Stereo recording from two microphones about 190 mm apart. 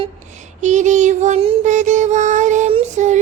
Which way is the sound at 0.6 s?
40° right (ahead or behind).